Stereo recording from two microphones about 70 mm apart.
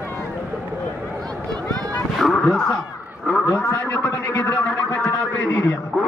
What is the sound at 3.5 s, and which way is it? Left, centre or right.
Speech, left.